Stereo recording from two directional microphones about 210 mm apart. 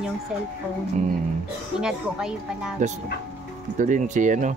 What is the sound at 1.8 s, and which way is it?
Speech, 5° right (ahead or behind).